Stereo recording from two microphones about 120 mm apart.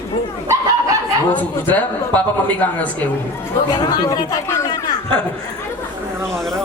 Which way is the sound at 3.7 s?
35° left (ahead or behind).